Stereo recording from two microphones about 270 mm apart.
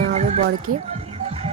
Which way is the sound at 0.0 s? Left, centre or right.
Right.